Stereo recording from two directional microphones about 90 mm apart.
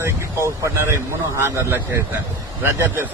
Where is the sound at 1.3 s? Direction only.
35° right (ahead or behind).